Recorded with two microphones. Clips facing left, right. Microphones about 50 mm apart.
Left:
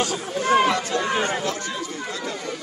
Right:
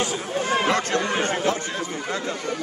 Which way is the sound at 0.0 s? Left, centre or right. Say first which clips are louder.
Even; right.